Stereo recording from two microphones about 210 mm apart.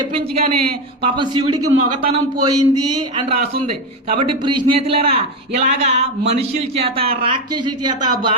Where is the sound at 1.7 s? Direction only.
90° right.